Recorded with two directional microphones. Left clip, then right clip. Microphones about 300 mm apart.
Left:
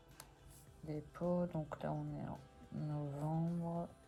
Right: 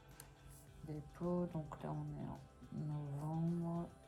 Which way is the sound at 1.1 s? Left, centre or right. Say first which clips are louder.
Left 3 dB; left.